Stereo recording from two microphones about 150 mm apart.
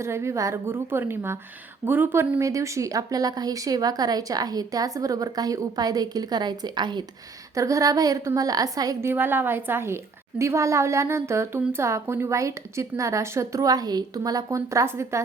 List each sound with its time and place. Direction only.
0.0 s a woman's voice: 20° right (ahead or behind)